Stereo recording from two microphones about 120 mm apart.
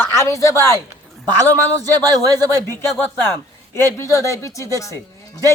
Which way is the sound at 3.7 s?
25° left (ahead or behind).